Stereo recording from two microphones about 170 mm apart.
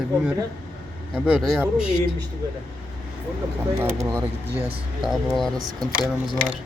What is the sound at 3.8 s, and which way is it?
Speech, 15° right (ahead or behind).